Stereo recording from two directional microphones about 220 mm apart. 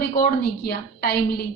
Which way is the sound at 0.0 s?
45° left (ahead or behind).